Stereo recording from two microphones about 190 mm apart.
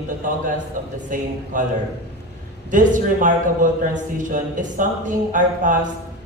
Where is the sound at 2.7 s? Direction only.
45° right (ahead or behind).